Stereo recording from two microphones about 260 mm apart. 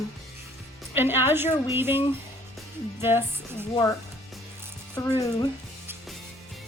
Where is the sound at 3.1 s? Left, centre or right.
Centre.